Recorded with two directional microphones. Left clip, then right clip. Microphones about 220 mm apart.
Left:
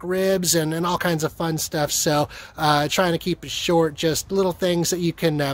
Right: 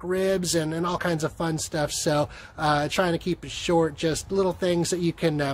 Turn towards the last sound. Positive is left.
turn(degrees=35)  # may be behind; listen again after turning